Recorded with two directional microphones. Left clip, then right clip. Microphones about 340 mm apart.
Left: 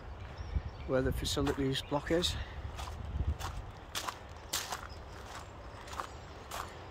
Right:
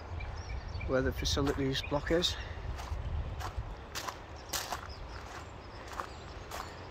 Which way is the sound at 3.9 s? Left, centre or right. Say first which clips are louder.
Left 1 dB; centre.